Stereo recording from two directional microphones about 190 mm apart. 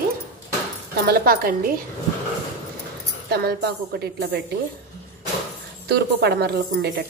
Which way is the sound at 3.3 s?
55° right (ahead or behind).